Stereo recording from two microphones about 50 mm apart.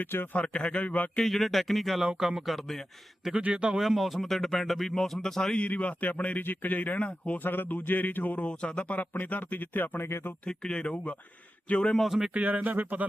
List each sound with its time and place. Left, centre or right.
0.0 s a man's voice: left
0.3 s a man's voice: left
1.2 s speech: centre
2.0 s speech: centre
3.5 s speech: right
3.8 s speech: centre
5.6 s a man's voice: left
7.3 s speech: left
8.4 s speech: left
10.1 s speech: left
10.5 s a man's voice: centre
11.9 s speech: centre
12.3 s speech: right